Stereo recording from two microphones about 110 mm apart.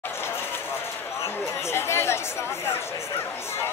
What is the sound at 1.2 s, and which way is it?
Chatter, 25° left (ahead or behind).